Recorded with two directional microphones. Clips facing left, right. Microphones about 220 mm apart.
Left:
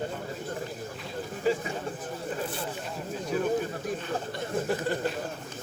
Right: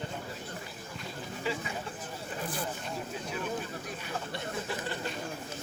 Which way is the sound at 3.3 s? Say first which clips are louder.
Left 10 dB; 50° left (ahead or behind).